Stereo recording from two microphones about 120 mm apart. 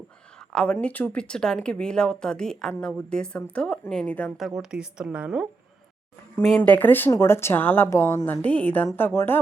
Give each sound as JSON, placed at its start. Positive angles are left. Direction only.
{"t": 0.5, "sound": "speech", "side_deg": 10}
{"t": 4.4, "sound": "a woman's voice", "side_deg": 0}
{"t": 6.6, "sound": "speech", "side_deg": 15}